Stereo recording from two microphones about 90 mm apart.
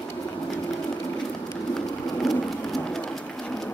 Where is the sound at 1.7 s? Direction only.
5° left (ahead or behind).